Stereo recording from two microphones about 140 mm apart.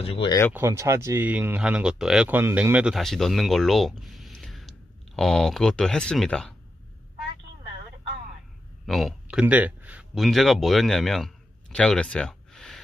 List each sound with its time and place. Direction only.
0.0 s speech: 45° left (ahead or behind)
0.5 s speech: 20° right (ahead or behind); by 6.5 s 5° left (ahead or behind)
8.8 s a sound: centre (ahead or behind)
10.1 s a man's voice: centre (ahead or behind)